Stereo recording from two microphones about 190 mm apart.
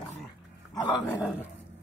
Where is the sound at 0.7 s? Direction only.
20° left (ahead or behind).